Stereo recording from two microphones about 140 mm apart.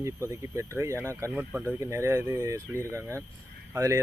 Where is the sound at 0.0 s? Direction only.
20° right (ahead or behind).